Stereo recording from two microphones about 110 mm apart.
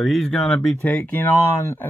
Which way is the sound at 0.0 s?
Centre (ahead or behind).